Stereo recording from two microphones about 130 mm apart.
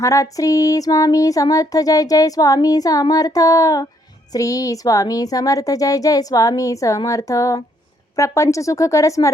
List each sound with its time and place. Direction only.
0.0 s child singing: 25° left (ahead or behind)